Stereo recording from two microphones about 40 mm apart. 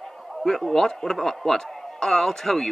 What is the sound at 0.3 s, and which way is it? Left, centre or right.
A man's voice, centre.